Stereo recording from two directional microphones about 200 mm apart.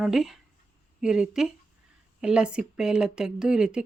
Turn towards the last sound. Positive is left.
turn(degrees=-5)  # may be behind; listen again after turning